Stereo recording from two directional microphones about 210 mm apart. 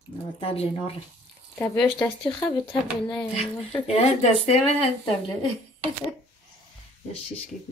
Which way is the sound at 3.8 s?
30° left (ahead or behind).